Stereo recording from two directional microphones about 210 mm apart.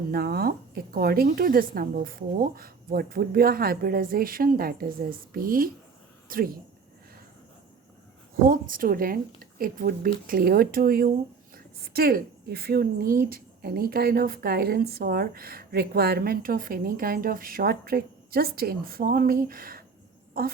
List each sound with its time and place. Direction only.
0.1 s a woman's voice: 45° right (ahead or behind)
8.4 s a woman's voice: 40° right (ahead or behind)